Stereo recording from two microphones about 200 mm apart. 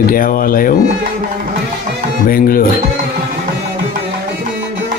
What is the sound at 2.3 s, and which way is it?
Speech, 45° left (ahead or behind).